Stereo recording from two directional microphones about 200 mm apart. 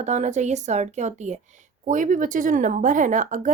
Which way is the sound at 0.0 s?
35° right (ahead or behind).